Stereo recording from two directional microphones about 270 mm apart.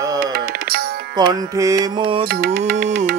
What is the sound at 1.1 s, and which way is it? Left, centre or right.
Music, centre.